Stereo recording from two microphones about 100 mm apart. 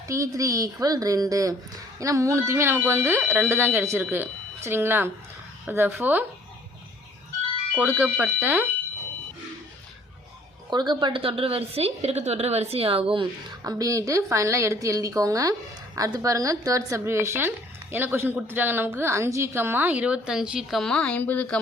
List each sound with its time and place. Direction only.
0.1 s a woman's voice: 35° right (ahead or behind)
7.8 s a woman's voice: 15° right (ahead or behind)
10.7 s a woman's voice: 50° right (ahead or behind); by 13.2 s 65° right (ahead or behind)
13.7 s a woman's voice: 35° right (ahead or behind); by 21.4 s 15° left (ahead or behind)